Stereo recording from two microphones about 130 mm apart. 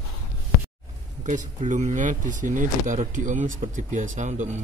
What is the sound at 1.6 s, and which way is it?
Speech, 75° right (ahead or behind).